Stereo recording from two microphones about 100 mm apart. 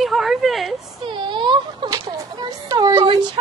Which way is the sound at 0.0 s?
Centre (ahead or behind).